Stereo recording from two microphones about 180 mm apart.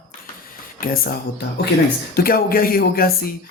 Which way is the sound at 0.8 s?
50° left (ahead or behind).